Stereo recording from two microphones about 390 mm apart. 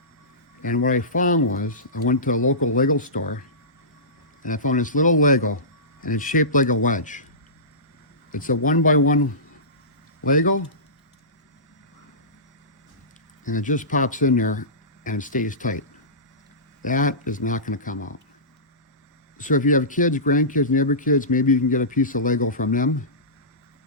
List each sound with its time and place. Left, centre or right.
0.6 s speech: centre
4.4 s speech: centre
8.3 s speech: left
10.2 s speech: left
13.4 s speech: centre
16.8 s speech: centre
19.4 s speech: centre